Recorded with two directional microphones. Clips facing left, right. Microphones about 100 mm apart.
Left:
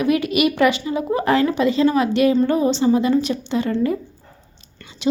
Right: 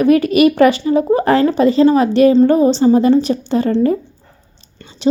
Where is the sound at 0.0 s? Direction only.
40° right (ahead or behind).